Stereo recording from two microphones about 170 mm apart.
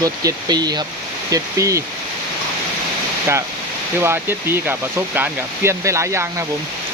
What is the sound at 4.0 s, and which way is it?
Speech, 15° right (ahead or behind).